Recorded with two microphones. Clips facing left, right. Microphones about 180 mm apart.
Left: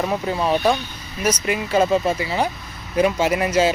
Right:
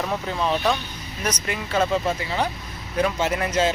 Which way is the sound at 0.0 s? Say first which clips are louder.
Left 4 dB; 10° left (ahead or behind).